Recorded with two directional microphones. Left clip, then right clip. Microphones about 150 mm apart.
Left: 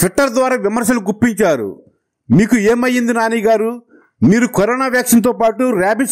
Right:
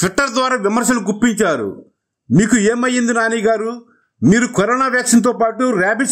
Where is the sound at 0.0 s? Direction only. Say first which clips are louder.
Left 2 dB; 35° left (ahead or behind).